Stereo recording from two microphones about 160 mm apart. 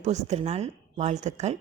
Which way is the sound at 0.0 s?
45° right (ahead or behind).